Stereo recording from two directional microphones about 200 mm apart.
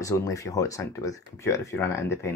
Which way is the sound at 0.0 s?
15° left (ahead or behind).